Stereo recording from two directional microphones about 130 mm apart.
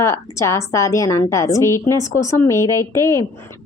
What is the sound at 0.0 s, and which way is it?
A woman's voice, 20° left (ahead or behind).